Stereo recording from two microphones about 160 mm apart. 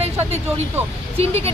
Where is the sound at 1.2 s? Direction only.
40° right (ahead or behind).